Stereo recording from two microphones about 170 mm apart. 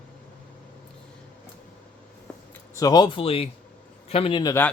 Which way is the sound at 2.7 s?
20° left (ahead or behind).